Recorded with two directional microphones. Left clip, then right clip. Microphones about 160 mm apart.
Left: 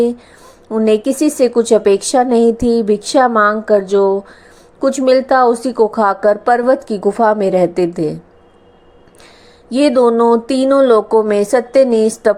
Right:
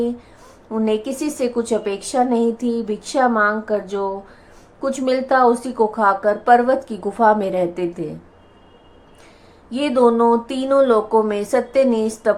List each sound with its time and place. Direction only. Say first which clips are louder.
0.9 s speech: left 9 dB; 35° left (ahead or behind)
9.6 s speech: left 5 dB; 35° left (ahead or behind)